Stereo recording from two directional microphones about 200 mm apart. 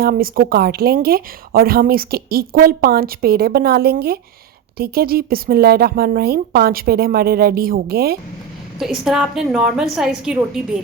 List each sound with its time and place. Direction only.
0.0 s speech: 50° right (ahead or behind)
8.8 s a woman's voice: centre (ahead or behind)